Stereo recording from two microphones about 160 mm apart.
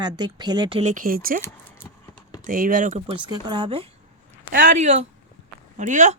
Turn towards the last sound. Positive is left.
turn(degrees=-50)  # may be behind; listen again after turning